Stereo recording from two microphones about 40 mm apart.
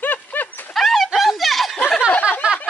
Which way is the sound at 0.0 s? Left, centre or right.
Left.